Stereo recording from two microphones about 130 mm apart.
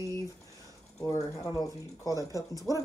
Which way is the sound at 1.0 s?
30° left (ahead or behind).